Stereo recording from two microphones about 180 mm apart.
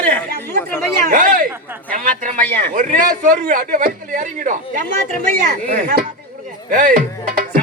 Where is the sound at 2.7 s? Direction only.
45° right (ahead or behind).